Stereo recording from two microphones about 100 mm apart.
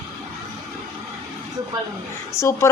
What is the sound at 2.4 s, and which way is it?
Speech, 30° left (ahead or behind).